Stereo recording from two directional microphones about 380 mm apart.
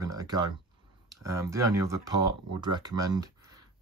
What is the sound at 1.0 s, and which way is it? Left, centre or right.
Speech, centre.